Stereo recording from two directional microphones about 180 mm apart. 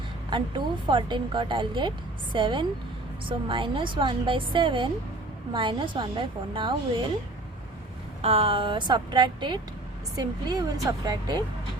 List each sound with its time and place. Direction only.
0.3 s speech: 25° right (ahead or behind)
8.2 s speech: 35° right (ahead or behind)